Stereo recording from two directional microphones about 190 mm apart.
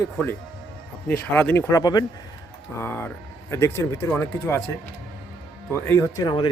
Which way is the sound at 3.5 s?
15° left (ahead or behind).